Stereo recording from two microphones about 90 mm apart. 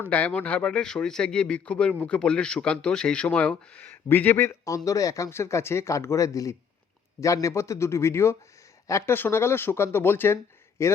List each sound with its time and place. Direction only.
0.0 s a man's voice: 15° left (ahead or behind); by 10.9 s 30° left (ahead or behind)